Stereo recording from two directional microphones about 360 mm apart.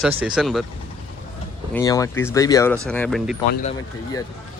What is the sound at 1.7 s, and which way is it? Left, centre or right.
Speech, centre.